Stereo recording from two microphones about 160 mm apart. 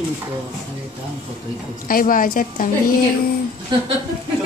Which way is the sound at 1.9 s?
60° left (ahead or behind).